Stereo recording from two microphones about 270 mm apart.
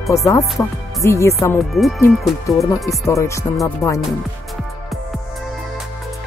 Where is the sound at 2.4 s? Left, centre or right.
Centre.